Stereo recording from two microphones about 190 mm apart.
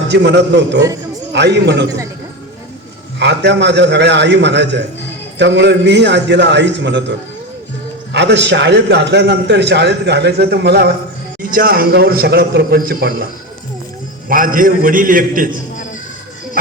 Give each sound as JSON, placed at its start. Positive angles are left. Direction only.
{"t": 0.1, "sound": "a man's voice", "side_deg": -65}
{"t": 3.2, "sound": "a man's voice", "side_deg": -65}
{"t": 8.1, "sound": "a man's voice", "side_deg": -65}
{"t": 14.3, "sound": "a man's voice", "side_deg": -45}